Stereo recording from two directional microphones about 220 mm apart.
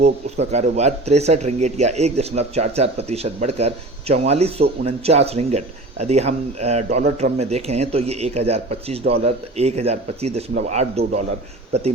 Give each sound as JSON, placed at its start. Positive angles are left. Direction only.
{"t": 0.0, "sound": "speech", "side_deg": -30}